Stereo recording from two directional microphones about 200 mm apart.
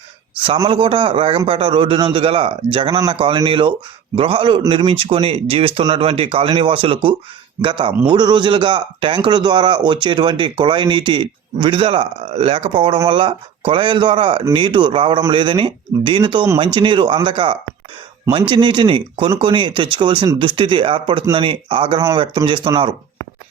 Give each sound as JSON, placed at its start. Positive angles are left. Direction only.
{"t": 0.4, "sound": "a man's voice", "side_deg": -25}